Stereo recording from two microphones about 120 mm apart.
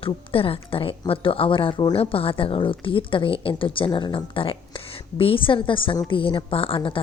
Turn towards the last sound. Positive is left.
turn(degrees=45)  # may be behind; listen again after turning